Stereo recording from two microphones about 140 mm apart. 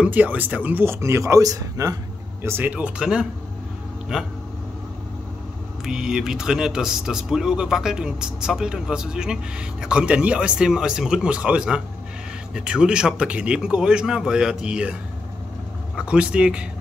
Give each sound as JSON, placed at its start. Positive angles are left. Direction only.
{"t": 0.0, "sound": "speech", "side_deg": -10}
{"t": 2.4, "sound": "speech", "side_deg": -15}
{"t": 5.9, "sound": "speech", "side_deg": -5}
{"t": 16.0, "sound": "speech", "side_deg": -5}